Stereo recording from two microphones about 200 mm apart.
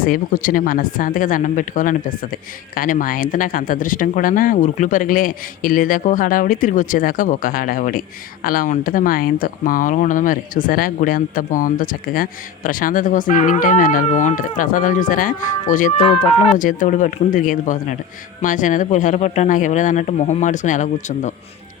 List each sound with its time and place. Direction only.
0.0 s speech: 45° left (ahead or behind)